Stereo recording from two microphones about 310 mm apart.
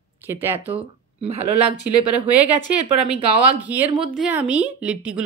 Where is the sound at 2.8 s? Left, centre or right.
Centre.